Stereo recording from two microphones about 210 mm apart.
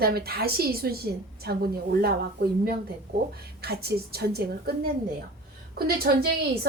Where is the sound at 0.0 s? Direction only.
45° right (ahead or behind).